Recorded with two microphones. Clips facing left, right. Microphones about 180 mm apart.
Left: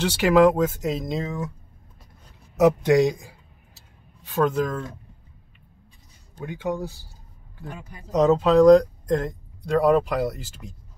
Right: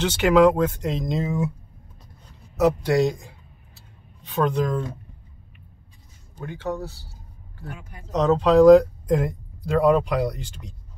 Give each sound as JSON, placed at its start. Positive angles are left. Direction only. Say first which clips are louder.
{"t": 0.0, "sound": "speech", "louder": "even", "side_deg": 5}
{"t": 2.5, "sound": "speech", "louder": "left 2 dB", "side_deg": 15}
{"t": 6.4, "sound": "speech", "louder": "left 1 dB", "side_deg": 15}
{"t": 8.1, "sound": "speech", "louder": "even", "side_deg": 10}